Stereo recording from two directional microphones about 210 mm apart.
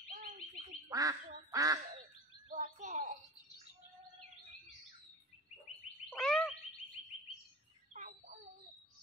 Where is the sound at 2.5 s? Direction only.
35° right (ahead or behind).